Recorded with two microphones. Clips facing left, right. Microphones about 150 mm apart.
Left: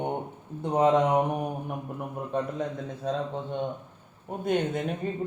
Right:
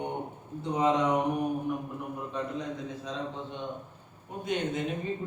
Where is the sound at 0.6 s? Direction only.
50° left (ahead or behind).